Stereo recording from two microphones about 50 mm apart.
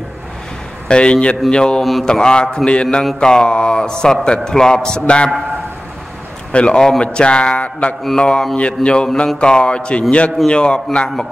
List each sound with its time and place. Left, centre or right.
0.8 s a man's voice: centre
1.8 s mantra: centre
2.0 s a man's voice: centre
6.5 s a man's voice: centre
8.2 s a man's voice: centre